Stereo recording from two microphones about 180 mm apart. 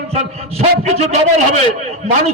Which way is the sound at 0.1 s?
35° right (ahead or behind).